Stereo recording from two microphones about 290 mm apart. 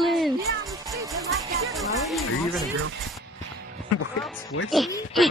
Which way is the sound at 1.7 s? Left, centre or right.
Centre.